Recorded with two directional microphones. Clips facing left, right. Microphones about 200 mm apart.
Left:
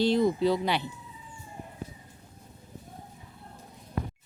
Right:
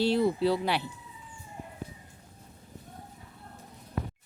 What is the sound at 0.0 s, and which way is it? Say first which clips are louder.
Speech: left 1 dB; 5° right (ahead or behind).